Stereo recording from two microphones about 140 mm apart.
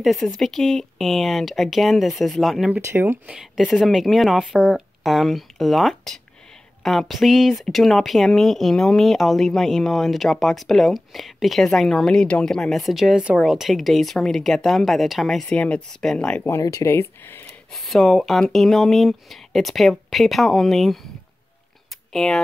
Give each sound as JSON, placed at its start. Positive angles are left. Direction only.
{"t": 0.0, "sound": "speech", "side_deg": 0}
{"t": 2.8, "sound": "speech", "side_deg": -15}
{"t": 16.4, "sound": "speech", "side_deg": 25}
{"t": 17.7, "sound": "speech", "side_deg": 0}
{"t": 22.1, "sound": "speech", "side_deg": 5}